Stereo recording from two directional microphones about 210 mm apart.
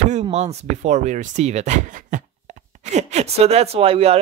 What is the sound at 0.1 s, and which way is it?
Speech, 30° right (ahead or behind).